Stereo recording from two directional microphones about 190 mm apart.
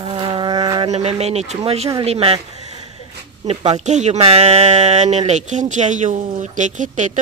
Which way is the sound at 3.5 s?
35° right (ahead or behind).